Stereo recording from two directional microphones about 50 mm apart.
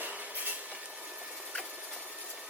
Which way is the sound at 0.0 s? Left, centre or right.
Right.